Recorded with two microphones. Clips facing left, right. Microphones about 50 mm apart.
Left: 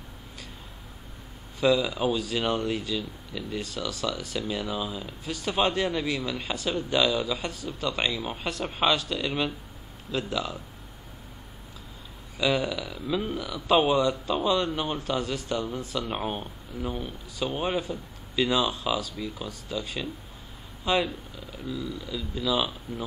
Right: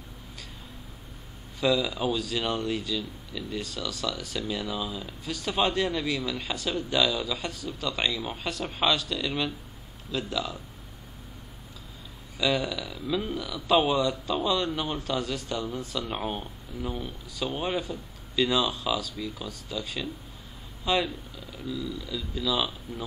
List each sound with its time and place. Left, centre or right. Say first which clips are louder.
1.6 s speech: left 2 dB; centre
12.4 s speech: left 1 dB; centre
16.3 s speech: left 1 dB; left
16.9 s speech: left 1 dB; centre